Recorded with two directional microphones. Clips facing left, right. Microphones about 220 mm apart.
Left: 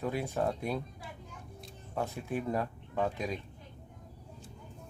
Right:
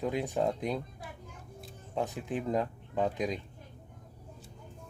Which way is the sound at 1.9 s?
15° right (ahead or behind).